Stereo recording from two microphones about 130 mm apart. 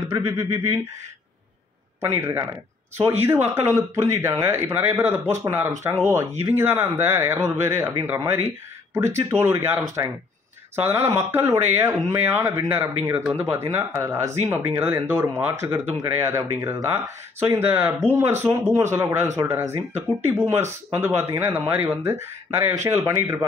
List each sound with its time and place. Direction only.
2.0 s speech: 20° right (ahead or behind)
10.8 s speech: 20° right (ahead or behind)